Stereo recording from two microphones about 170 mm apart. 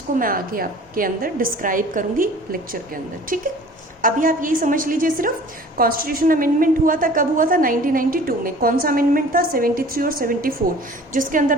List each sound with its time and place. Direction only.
0.2 s a woman's voice: 55° right (ahead or behind)